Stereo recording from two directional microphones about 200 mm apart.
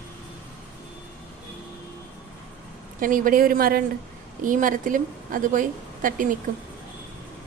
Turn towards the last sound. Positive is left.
turn(degrees=-40)  # may be behind; listen again after turning